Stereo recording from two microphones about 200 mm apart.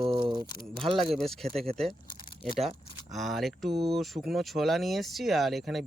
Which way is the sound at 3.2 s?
Centre (ahead or behind).